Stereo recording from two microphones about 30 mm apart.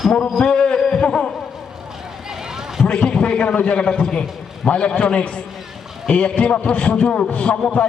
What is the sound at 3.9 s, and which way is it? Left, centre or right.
Speech, left.